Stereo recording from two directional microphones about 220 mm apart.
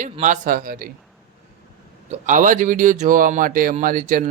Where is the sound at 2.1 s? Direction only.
35° right (ahead or behind).